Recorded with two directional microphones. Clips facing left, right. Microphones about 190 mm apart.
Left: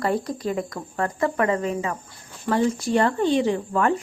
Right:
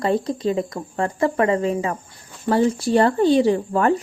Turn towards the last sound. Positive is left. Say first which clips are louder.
# right 4 dB
turn(degrees=-35)  # may be behind; listen again after turning